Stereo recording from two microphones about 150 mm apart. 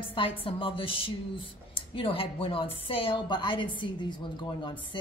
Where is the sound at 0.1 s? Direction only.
35° left (ahead or behind).